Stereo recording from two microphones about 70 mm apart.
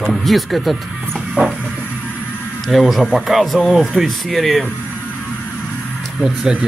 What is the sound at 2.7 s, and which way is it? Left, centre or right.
Speech, centre.